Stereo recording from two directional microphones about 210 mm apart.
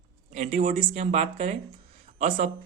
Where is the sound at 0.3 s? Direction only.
35° right (ahead or behind).